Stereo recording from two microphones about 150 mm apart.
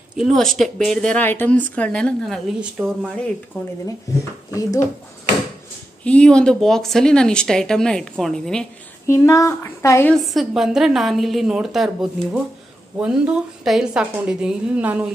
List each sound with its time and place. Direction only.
0.2 s a woman's voice: centre (ahead or behind)
3.6 s a woman's voice: 10° left (ahead or behind)
4.6 s speech: 20° left (ahead or behind)
6.0 s speech: 5° left (ahead or behind)
9.0 s speech: 20° left (ahead or behind)
10.2 s a woman's voice: centre (ahead or behind)